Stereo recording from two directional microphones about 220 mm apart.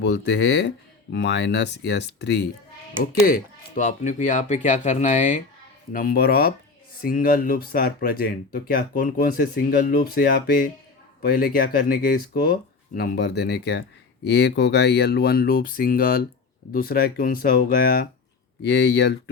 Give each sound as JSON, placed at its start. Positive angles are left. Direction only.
{"t": 0.0, "sound": "speech", "side_deg": 50}